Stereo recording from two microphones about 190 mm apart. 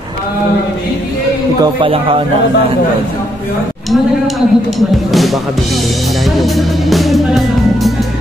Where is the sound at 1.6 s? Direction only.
25° right (ahead or behind).